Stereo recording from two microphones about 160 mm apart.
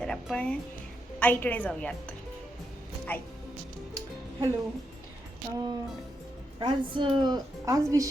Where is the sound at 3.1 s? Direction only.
10° left (ahead or behind).